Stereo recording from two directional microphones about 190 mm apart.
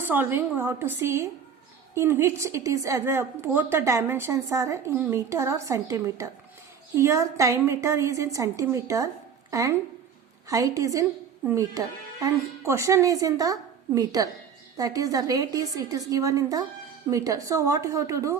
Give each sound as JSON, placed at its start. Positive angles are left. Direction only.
{"t": 0.0, "sound": "a woman's voice", "side_deg": -10}